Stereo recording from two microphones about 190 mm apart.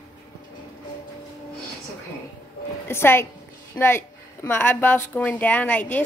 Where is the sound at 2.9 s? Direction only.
10° left (ahead or behind).